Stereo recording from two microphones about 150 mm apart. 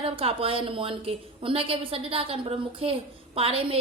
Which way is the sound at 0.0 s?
40° right (ahead or behind).